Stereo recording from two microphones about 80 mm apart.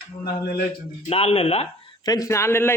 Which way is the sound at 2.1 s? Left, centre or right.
Left.